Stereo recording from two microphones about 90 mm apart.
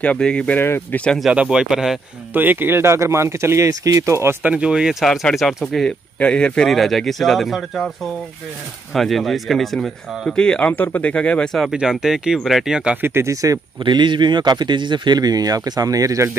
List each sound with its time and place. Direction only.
0.0 s speech: 10° left (ahead or behind)
0.6 s speech: 25° left (ahead or behind)
1.3 s speech: 10° right (ahead or behind)
2.3 s speech: 20° right (ahead or behind)
4.4 s speech: 15° right (ahead or behind); by 5.9 s centre (ahead or behind)
6.1 s speech: 15° left (ahead or behind)
8.9 s speech: centre (ahead or behind)
11.7 s speech: 5° right (ahead or behind)
12.9 s speech: 25° right (ahead or behind)
13.8 s speech: 60° right (ahead or behind); by 16.3 s 40° right (ahead or behind)